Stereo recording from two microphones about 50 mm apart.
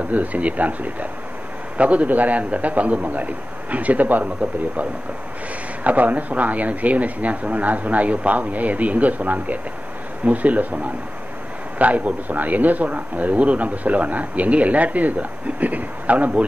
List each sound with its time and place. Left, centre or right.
0.1 s speech: right
5.9 s speech: right